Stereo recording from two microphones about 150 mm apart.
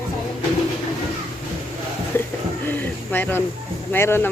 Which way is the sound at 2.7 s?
15° left (ahead or behind).